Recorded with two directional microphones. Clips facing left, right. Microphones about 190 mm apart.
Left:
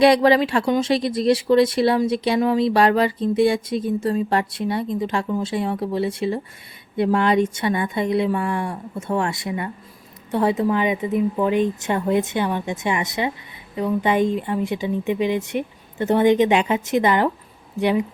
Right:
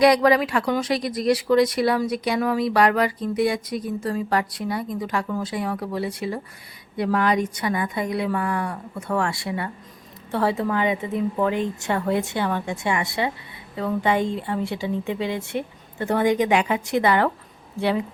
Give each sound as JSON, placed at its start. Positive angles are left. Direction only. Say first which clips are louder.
{"t": 0.0, "sound": "speech", "louder": "left 2 dB", "side_deg": 25}